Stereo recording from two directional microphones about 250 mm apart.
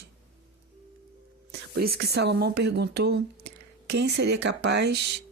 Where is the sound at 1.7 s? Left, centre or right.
Right.